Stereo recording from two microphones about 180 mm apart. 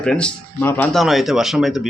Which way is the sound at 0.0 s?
5° left (ahead or behind).